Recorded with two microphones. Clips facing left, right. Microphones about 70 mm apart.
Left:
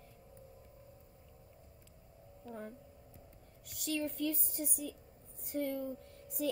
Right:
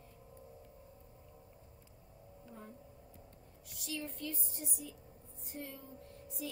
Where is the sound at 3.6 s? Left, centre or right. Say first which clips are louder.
Left 6 dB; left.